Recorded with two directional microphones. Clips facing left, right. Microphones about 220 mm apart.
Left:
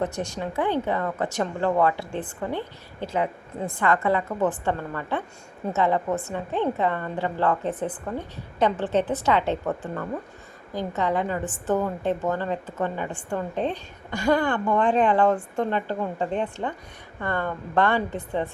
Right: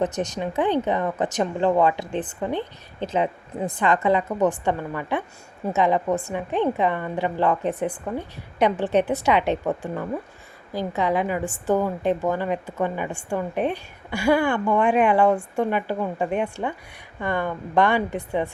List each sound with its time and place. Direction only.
0.0 s a woman's voice: 20° right (ahead or behind)